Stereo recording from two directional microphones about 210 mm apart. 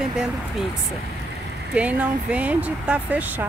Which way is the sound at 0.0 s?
5° right (ahead or behind).